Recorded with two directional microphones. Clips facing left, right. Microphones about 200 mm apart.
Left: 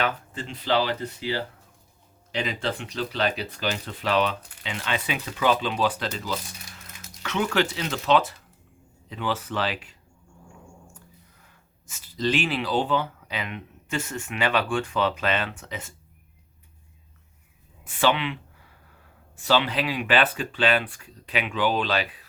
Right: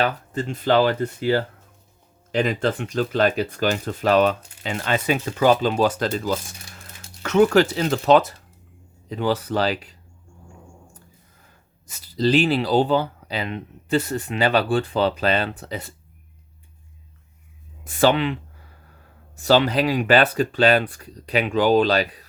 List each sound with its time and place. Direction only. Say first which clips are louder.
0.0 s speech: right 5 dB; 45° right (ahead or behind)
11.9 s speech: right 6 dB; 35° right (ahead or behind)
17.8 s speech: right 5 dB; 40° right (ahead or behind)
19.4 s speech: right 6 dB; 40° right (ahead or behind)